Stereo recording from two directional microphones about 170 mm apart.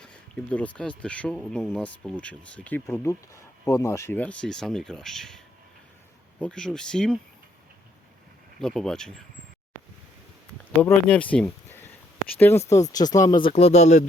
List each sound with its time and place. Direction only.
0.0 s speech: 5° left (ahead or behind)
6.4 s speech: 5° left (ahead or behind)
8.5 s speech: 5° left (ahead or behind)
10.8 s speech: 10° left (ahead or behind)
13.4 s speech: 35° left (ahead or behind)